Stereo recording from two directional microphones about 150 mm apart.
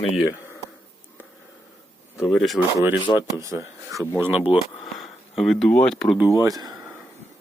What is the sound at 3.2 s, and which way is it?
Speech, 20° right (ahead or behind).